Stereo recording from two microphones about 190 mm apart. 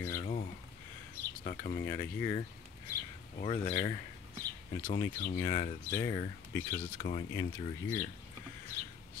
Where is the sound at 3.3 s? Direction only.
30° left (ahead or behind).